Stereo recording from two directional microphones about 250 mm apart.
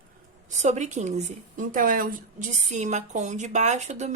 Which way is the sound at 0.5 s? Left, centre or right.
Right.